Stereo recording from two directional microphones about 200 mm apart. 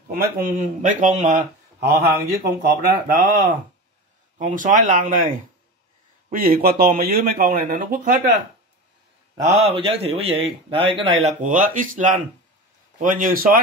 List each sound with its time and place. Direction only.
0.1 s speech: 45° right (ahead or behind)
2.0 s speech: 50° right (ahead or behind)
9.4 s a man's voice: 30° right (ahead or behind)
11.4 s speech: 40° right (ahead or behind)